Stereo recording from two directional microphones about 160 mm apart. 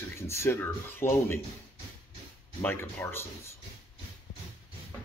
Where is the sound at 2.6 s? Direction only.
15° left (ahead or behind).